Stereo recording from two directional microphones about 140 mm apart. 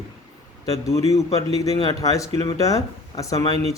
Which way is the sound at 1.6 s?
25° left (ahead or behind).